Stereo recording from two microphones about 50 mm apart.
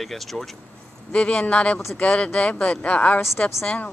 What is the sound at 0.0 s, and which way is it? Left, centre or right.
Speech, centre.